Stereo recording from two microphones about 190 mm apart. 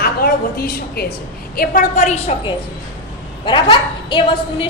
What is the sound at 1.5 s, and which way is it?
Speech, 45° left (ahead or behind).